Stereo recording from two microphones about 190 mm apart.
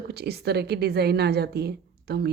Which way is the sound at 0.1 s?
60° right (ahead or behind).